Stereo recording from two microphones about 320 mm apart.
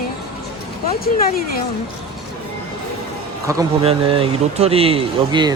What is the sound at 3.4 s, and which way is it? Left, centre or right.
Speech, centre.